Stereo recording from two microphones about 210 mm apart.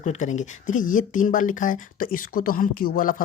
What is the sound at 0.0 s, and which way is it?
Speech, 35° left (ahead or behind).